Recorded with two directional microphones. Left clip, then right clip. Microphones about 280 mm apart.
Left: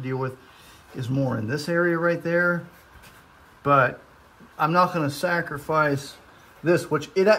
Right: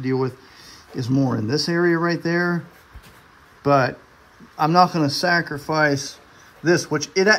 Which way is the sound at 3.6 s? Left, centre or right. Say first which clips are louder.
Right 1 dB; centre.